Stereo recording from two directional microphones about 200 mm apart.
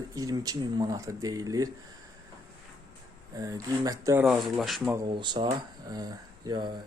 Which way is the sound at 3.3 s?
20° right (ahead or behind).